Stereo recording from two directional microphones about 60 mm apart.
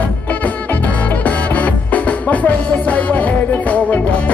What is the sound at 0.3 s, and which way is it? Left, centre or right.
Music, left.